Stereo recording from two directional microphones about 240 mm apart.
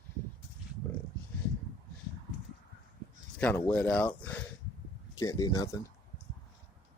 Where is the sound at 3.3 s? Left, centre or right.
Centre.